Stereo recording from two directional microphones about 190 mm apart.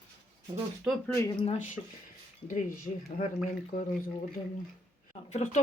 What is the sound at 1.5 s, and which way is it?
Speech, 40° left (ahead or behind).